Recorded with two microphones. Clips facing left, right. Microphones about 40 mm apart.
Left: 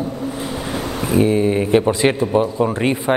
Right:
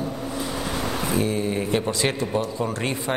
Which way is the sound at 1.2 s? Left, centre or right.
Left.